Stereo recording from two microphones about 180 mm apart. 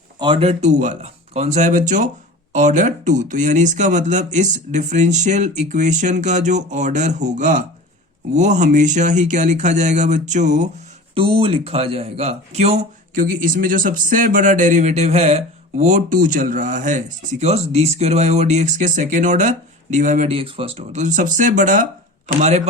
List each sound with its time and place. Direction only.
0.2 s speech: 30° right (ahead or behind)
11.1 s speech: 30° right (ahead or behind)